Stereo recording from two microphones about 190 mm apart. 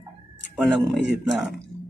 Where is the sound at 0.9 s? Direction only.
65° right (ahead or behind).